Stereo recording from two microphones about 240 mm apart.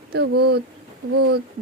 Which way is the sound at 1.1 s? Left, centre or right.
Right.